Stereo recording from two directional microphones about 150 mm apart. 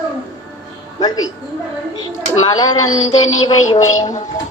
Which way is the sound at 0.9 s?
25° left (ahead or behind).